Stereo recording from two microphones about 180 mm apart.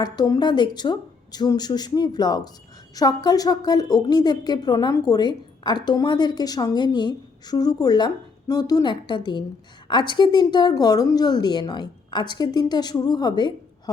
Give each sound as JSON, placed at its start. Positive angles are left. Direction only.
{"t": 0.0, "sound": "a woman's voice", "side_deg": 20}